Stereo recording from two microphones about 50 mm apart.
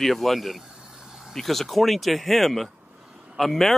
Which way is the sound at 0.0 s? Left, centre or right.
Centre.